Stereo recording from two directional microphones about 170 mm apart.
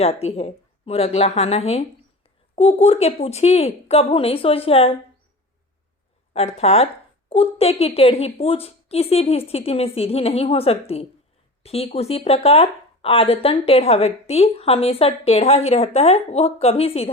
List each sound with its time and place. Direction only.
0.0 s speech: 40° left (ahead or behind)
6.3 s speech: 40° left (ahead or behind)